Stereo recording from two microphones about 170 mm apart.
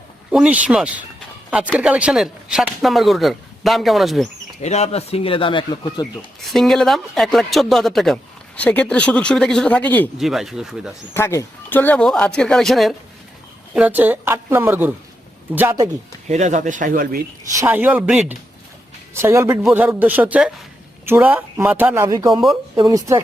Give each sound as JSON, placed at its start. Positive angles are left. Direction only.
{"t": 0.3, "sound": "speech", "side_deg": -5}
{"t": 4.6, "sound": "speech", "side_deg": 40}
{"t": 6.4, "sound": "speech", "side_deg": 0}
{"t": 10.2, "sound": "speech", "side_deg": 0}
{"t": 11.1, "sound": "speech", "side_deg": 15}
{"t": 16.3, "sound": "speech", "side_deg": -45}
{"t": 17.6, "sound": "speech", "side_deg": -10}